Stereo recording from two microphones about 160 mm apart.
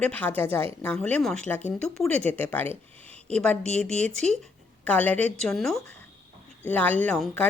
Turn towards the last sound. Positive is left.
turn(degrees=5)  # may be behind; listen again after turning